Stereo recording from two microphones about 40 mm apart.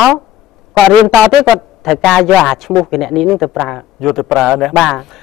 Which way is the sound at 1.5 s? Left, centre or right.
Centre.